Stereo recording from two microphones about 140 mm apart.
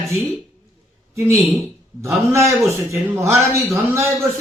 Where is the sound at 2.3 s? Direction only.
20° right (ahead or behind).